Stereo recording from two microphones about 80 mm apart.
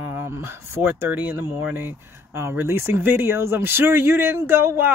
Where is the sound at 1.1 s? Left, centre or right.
Centre.